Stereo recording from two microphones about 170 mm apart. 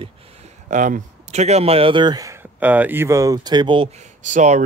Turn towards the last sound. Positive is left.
turn(degrees=-45)  # may be behind; listen again after turning